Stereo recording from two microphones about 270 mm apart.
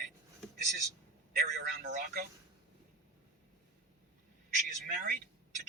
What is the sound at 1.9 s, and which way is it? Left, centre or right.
Speech, right.